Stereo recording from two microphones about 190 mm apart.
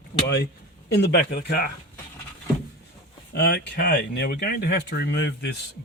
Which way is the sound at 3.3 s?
60° left (ahead or behind).